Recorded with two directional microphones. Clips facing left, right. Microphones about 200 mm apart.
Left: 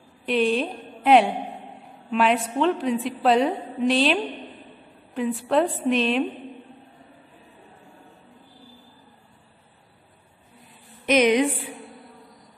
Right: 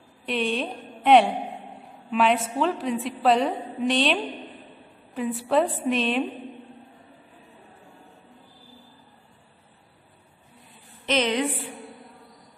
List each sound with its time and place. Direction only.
0.2 s a woman's voice: centre (ahead or behind)
11.1 s a woman's voice: 15° left (ahead or behind)